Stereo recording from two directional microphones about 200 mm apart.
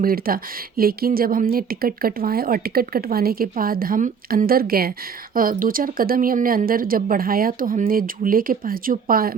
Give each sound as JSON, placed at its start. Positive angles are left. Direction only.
{"t": 0.0, "sound": "speech", "side_deg": -45}